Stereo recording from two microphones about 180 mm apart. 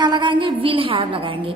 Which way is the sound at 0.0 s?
25° right (ahead or behind).